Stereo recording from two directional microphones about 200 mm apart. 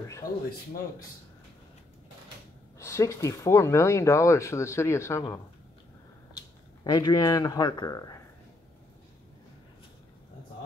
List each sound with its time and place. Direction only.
2.8 s speech: 15° left (ahead or behind)